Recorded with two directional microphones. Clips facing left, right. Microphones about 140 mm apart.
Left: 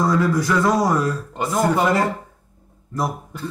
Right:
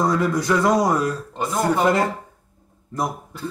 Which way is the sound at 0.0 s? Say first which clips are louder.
Left 1 dB; 20° right (ahead or behind).